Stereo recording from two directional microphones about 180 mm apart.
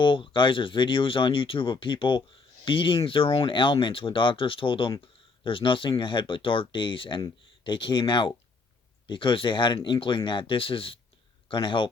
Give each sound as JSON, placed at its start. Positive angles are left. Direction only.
{"t": 0.0, "sound": "speech", "side_deg": 25}